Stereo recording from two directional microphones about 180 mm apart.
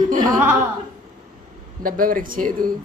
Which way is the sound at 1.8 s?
50° right (ahead or behind).